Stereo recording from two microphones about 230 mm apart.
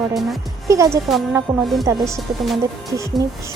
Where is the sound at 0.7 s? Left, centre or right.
Centre.